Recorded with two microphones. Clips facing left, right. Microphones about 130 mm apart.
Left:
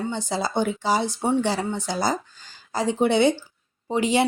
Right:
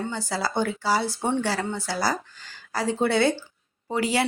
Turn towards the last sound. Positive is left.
turn(degrees=20)  # may be behind; listen again after turning